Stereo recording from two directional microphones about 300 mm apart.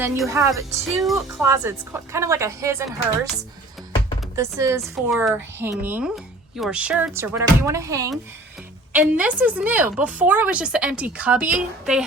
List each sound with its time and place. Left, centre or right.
0.0 s a woman's voice: centre
4.4 s a woman's voice: centre